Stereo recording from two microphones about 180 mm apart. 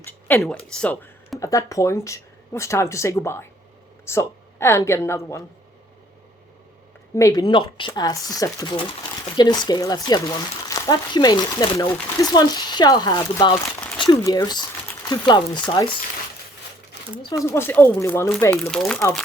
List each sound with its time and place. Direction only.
0.0 s a sound: 10° left (ahead or behind)
0.4 s a woman's voice: 5° left (ahead or behind)
7.2 s speech: 20° left (ahead or behind)
17.2 s speech: 15° left (ahead or behind)
18.7 s speech: 5° left (ahead or behind)